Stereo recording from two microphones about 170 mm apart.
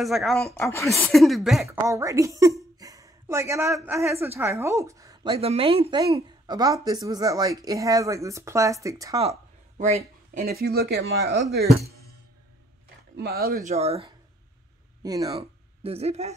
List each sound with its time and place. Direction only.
0.0 s speech: centre (ahead or behind)
0.7 s a woman's voice: 15° left (ahead or behind)
0.9 s speech: centre (ahead or behind)
1.7 s a woman's voice: 15° right (ahead or behind)
9.8 s speech: 45° right (ahead or behind)
10.4 s speech: 65° right (ahead or behind)
13.1 s speech: 70° right (ahead or behind)
13.7 s speech: 35° right (ahead or behind)
15.0 s a woman's voice: 20° right (ahead or behind)
15.3 s speech: 35° right (ahead or behind)